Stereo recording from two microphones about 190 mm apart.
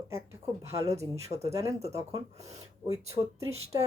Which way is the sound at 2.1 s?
35° right (ahead or behind).